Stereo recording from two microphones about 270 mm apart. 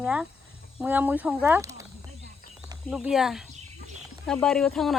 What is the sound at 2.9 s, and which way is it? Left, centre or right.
Speech, centre.